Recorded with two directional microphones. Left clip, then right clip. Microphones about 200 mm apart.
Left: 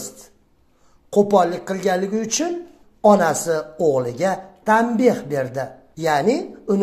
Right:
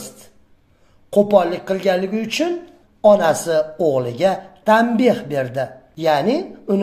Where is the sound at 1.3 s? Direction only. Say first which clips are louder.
Right 2 dB; 20° left (ahead or behind).